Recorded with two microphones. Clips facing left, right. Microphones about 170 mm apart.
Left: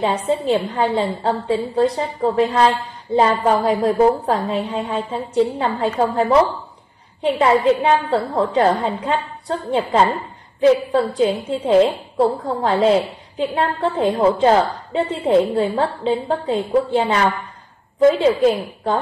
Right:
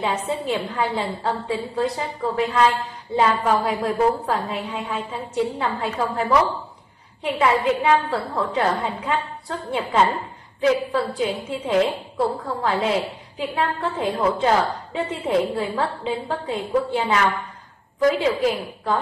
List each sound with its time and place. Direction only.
0.0 s a woman's voice: 35° left (ahead or behind)